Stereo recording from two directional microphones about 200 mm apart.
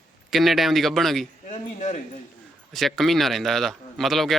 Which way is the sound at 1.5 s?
35° left (ahead or behind).